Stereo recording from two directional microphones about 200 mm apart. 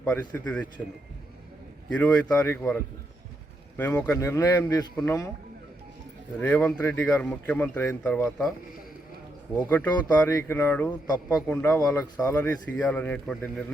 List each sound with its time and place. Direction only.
0.0 s speech: 5° left (ahead or behind)
1.9 s speech: 10° left (ahead or behind)
6.4 s speech: 10° left (ahead or behind)
9.6 s speech: 10° left (ahead or behind)